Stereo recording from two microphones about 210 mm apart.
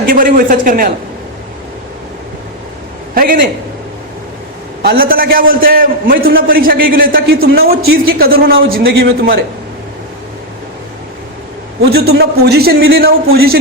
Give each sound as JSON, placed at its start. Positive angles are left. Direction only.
{"t": 0.0, "sound": "a man's voice", "side_deg": -40}
{"t": 4.8, "sound": "a man's voice", "side_deg": -45}
{"t": 11.9, "sound": "a man's voice", "side_deg": -50}